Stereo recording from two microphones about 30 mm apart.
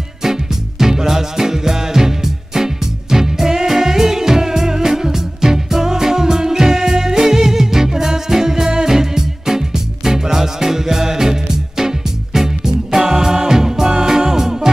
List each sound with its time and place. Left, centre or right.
0.2 s music: centre